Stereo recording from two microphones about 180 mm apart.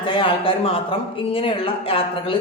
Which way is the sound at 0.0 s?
30° left (ahead or behind).